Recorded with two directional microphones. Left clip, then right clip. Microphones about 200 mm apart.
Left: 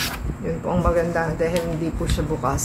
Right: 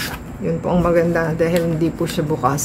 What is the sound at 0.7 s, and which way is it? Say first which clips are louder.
Speech: right 5 dB; 40° right (ahead or behind).